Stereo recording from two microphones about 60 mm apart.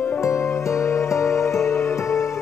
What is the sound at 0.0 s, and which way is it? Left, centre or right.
Music, left.